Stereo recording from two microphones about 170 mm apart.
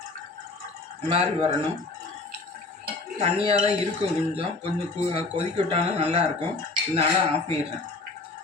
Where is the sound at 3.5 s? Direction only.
35° right (ahead or behind).